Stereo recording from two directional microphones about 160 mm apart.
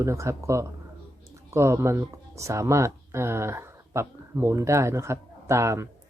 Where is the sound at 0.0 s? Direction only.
20° right (ahead or behind).